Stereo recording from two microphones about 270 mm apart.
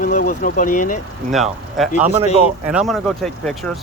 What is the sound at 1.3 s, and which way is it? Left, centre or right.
Speech, centre.